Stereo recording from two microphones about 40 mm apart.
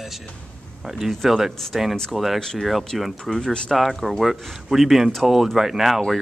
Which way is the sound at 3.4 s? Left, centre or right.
Centre.